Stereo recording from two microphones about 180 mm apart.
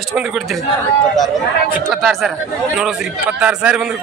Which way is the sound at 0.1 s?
5° right (ahead or behind).